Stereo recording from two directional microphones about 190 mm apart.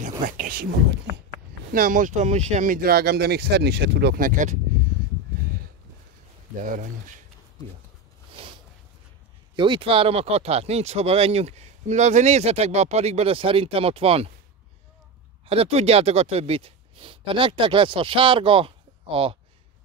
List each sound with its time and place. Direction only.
0.0 s speech: 45° right (ahead or behind)
1.7 s speech: 50° right (ahead or behind)
6.6 s speech: 45° right (ahead or behind)
8.3 s a sound: 25° right (ahead or behind)
9.6 s speech: 25° right (ahead or behind)
15.4 s speech: 30° right (ahead or behind)